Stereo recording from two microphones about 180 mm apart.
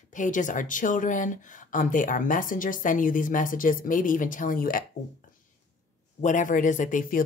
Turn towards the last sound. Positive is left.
turn(degrees=50)  # may be behind; listen again after turning